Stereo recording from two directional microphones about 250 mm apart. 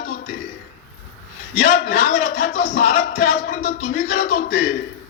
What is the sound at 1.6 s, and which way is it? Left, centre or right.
A man's voice, left.